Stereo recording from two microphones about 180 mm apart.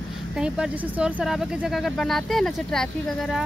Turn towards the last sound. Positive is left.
turn(degrees=5)  # may be behind; listen again after turning